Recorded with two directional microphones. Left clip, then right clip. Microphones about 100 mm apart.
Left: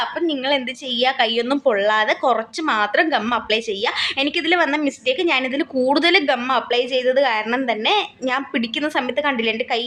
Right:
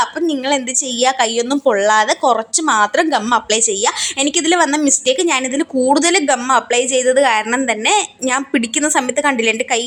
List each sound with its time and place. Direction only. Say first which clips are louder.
0.3 s a woman's voice: right 3 dB; 35° right (ahead or behind)
2.2 s a woman's voice: right 4 dB; 20° right (ahead or behind)